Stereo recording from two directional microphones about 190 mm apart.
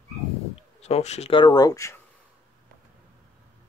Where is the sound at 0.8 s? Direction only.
35° left (ahead or behind); by 1.9 s 15° left (ahead or behind).